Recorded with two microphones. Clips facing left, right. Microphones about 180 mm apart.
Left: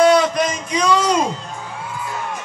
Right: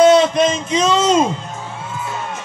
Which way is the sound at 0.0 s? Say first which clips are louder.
Right 3 dB; 25° right (ahead or behind).